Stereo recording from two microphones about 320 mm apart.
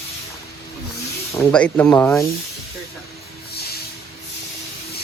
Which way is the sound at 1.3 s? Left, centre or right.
Centre.